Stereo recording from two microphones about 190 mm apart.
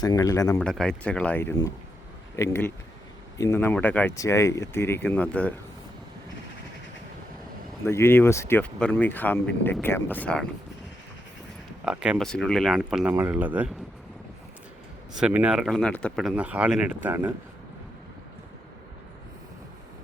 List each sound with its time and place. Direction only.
0.0 s speech: 20° left (ahead or behind)
0.6 s speech: 5° left (ahead or behind)
7.9 s speech: 15° left (ahead or behind)
11.9 s speech: 5° right (ahead or behind)
15.1 s speech: 5° right (ahead or behind)